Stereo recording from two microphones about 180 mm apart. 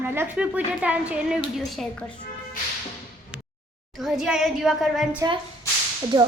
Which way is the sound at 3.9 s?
Centre (ahead or behind).